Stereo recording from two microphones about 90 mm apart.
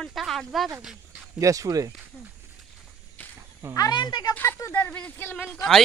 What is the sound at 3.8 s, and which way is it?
Speech, 50° left (ahead or behind).